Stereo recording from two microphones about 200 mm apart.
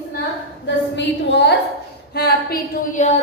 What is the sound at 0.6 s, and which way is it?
A woman's voice, 60° left (ahead or behind).